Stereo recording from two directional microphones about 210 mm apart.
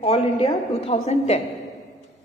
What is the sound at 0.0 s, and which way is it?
A woman's voice, 30° left (ahead or behind).